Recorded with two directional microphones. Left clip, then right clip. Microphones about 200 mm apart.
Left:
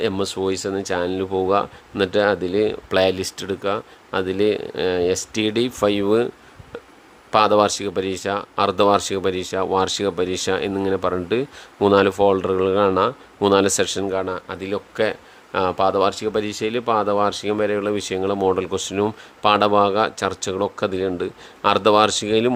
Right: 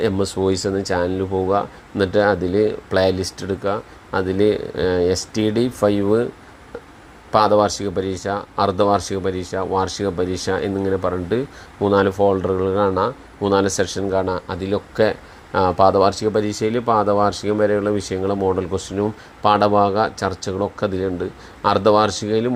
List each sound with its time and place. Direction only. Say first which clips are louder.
0.0 s speech: right 2 dB; 10° left (ahead or behind)
7.3 s speech: right 1 dB; 20° left (ahead or behind)
14.1 s speech: right 3 dB; 5° left (ahead or behind)